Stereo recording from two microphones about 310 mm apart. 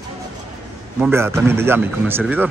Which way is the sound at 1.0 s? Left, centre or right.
Centre.